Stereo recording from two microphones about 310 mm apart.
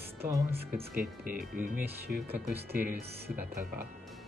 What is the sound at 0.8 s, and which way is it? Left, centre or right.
Speech, right.